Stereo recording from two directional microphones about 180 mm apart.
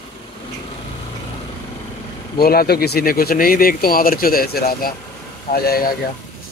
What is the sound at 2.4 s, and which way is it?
Speech, 60° left (ahead or behind).